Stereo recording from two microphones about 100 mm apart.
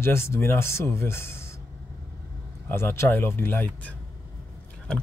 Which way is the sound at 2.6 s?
20° left (ahead or behind).